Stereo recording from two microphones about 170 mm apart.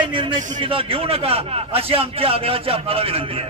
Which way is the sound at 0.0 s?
30° right (ahead or behind).